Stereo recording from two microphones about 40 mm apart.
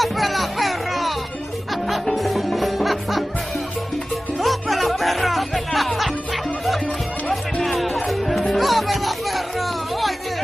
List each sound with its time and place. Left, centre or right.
0.0 s music: centre
4.4 s music: centre